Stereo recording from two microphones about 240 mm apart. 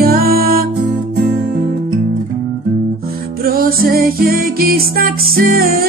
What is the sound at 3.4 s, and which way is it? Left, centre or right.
Music, right.